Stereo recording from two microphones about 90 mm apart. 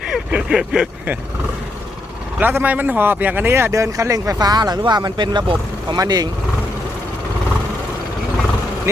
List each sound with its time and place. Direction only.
0.1 s speech: 10° right (ahead or behind)
2.4 s speech: 20° right (ahead or behind); by 5.5 s 55° right (ahead or behind)
6.0 s speech: 45° right (ahead or behind)